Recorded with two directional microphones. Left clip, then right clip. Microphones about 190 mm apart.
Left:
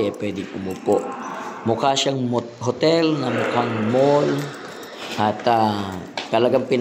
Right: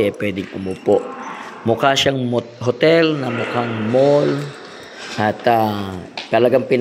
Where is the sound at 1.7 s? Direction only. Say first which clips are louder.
Right 4 dB; 10° right (ahead or behind).